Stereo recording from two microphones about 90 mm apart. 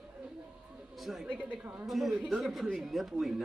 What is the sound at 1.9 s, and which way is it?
A man's voice, centre (ahead or behind).